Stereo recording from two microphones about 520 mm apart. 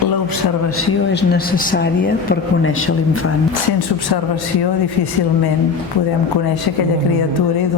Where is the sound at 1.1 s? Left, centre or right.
Centre.